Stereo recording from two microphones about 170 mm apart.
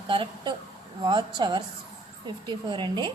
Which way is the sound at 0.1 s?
30° right (ahead or behind).